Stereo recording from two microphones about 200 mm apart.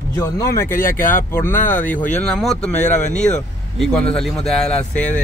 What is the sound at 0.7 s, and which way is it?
Speech, 45° left (ahead or behind).